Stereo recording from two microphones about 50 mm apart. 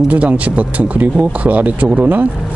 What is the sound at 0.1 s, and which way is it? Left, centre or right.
Speech, right.